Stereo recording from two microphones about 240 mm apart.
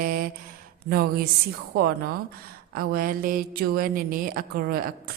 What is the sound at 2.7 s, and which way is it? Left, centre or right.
Speech, right.